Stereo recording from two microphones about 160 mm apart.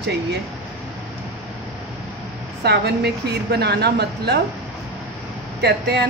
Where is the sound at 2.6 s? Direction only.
90° right.